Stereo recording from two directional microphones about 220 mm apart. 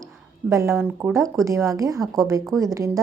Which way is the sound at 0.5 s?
15° right (ahead or behind).